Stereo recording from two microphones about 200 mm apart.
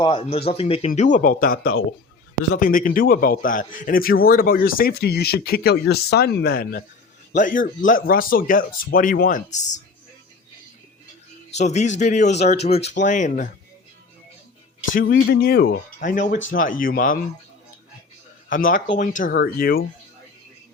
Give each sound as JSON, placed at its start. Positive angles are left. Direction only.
{"t": 0.0, "sound": "a man's voice", "side_deg": 25}
{"t": 11.5, "sound": "speech", "side_deg": 35}
{"t": 14.9, "sound": "a man's voice", "side_deg": 45}
{"t": 18.5, "sound": "a man's voice", "side_deg": 45}